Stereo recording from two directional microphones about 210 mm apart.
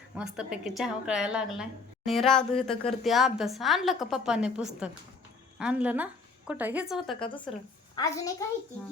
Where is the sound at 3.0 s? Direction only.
Centre (ahead or behind).